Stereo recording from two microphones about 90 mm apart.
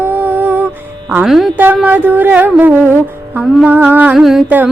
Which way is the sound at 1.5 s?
20° right (ahead or behind).